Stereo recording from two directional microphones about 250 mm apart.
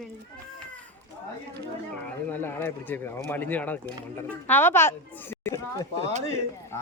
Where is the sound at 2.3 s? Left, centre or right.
Centre.